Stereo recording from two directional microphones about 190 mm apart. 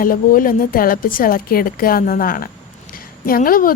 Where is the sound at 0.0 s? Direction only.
45° left (ahead or behind).